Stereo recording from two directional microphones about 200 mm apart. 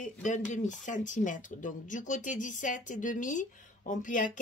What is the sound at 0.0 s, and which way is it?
Speech, 40° left (ahead or behind).